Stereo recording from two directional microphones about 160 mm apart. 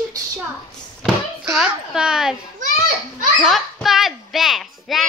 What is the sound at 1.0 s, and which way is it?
Speech, 5° right (ahead or behind).